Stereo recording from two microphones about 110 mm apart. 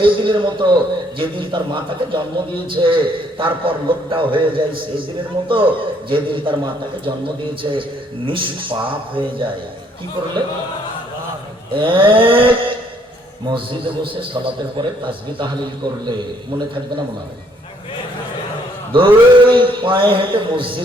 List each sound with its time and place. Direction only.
0.0 s a man's voice: 50° right (ahead or behind)
7.6 s a man's voice: 50° right (ahead or behind)
11.7 s a man's voice: 50° right (ahead or behind)
18.9 s a man's voice: 50° right (ahead or behind)